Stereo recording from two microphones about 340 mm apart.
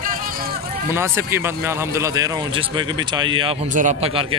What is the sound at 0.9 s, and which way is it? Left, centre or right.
Speech, centre.